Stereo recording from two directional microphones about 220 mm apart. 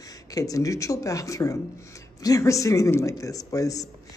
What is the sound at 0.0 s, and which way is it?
Speech, 15° left (ahead or behind).